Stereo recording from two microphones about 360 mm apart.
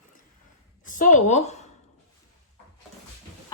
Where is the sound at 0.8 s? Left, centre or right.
Left.